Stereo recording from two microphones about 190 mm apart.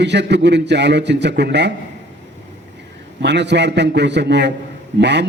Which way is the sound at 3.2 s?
65° right (ahead or behind).